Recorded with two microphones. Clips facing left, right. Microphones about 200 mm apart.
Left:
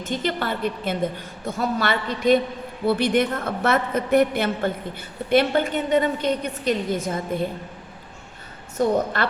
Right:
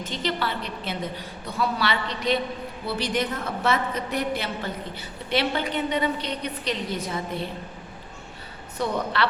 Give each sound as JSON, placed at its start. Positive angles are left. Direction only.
{"t": 0.0, "sound": "a woman's voice", "side_deg": 50}
{"t": 8.8, "sound": "a woman's voice", "side_deg": 45}